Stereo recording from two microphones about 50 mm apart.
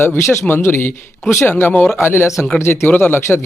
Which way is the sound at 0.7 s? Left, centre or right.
Left.